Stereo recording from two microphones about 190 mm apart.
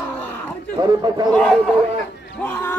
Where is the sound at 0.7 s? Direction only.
20° right (ahead or behind).